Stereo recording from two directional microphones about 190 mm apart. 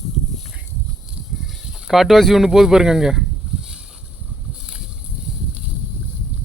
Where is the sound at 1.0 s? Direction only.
Centre (ahead or behind).